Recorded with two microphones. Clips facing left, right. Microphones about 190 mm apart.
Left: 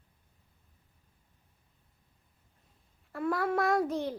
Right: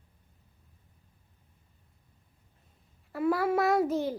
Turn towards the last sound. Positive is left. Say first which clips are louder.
# right 3 dB
turn(degrees=0)  # may be behind; listen again after turning